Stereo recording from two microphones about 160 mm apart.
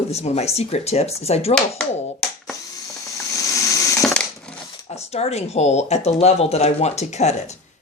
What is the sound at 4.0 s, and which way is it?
Crushing, 5° left (ahead or behind).